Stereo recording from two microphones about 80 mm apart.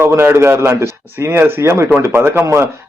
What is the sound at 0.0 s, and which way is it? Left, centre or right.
A man's voice, right.